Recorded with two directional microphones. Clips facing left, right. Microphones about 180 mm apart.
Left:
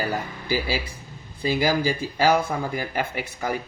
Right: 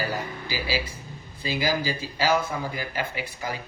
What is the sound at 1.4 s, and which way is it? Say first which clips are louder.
Speech: left 4 dB; 50° left (ahead or behind).